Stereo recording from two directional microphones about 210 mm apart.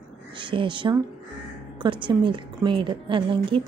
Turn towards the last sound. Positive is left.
turn(degrees=-25)  # may be behind; listen again after turning